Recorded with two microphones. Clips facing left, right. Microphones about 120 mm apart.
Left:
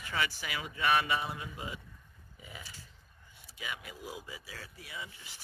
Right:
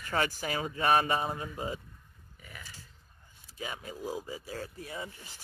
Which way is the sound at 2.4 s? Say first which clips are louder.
Left 1 dB; 15° left (ahead or behind).